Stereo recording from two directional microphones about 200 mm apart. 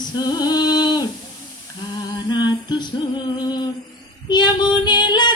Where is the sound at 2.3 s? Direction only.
20° left (ahead or behind).